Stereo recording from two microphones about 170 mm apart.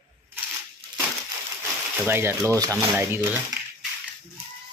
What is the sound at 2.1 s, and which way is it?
A man's voice, 15° right (ahead or behind).